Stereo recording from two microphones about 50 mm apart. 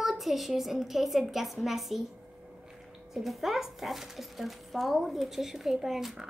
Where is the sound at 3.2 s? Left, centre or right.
Centre.